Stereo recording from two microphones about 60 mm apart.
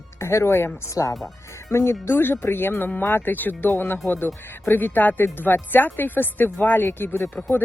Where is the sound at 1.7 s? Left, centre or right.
Left.